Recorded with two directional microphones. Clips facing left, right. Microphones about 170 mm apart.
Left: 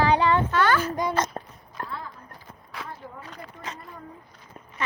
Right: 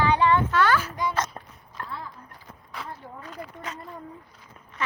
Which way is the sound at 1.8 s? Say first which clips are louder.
Left 2 dB; 40° left (ahead or behind).